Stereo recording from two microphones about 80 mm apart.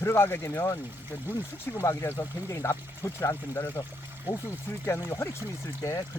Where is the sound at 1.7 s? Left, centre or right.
Left.